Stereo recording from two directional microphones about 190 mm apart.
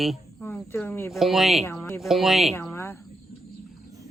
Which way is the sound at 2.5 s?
15° left (ahead or behind).